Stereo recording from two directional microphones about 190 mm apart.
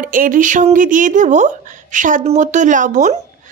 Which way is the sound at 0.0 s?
45° right (ahead or behind).